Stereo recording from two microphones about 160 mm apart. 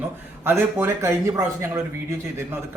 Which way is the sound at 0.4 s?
15° right (ahead or behind).